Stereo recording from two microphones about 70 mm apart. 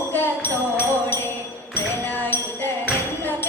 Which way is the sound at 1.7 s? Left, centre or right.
Left.